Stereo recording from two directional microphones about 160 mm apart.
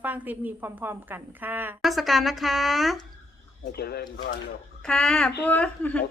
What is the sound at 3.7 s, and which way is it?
Speech, 80° left.